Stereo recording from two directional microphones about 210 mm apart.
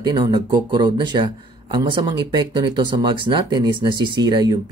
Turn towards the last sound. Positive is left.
turn(degrees=-20)  # may be behind; listen again after turning